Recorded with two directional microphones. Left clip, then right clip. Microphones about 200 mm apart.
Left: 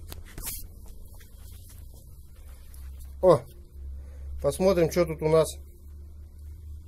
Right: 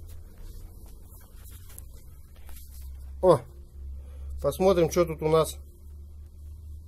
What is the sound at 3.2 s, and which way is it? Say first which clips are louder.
Speech: left 1 dB; centre (ahead or behind).